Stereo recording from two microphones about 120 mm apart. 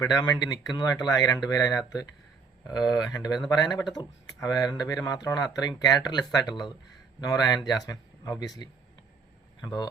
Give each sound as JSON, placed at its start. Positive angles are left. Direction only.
{"t": 0.0, "sound": "speech", "side_deg": 30}